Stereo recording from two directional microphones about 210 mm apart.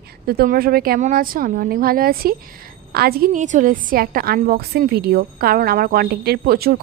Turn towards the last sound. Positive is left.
turn(degrees=-45)  # may be behind; listen again after turning